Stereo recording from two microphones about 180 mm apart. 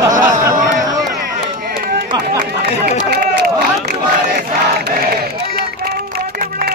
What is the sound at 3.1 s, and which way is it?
Crowd, 60° right (ahead or behind).